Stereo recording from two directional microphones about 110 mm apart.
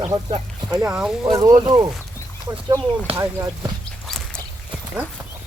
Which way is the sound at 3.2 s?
30° right (ahead or behind).